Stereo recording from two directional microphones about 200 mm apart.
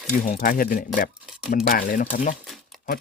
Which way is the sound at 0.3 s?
45° left (ahead or behind).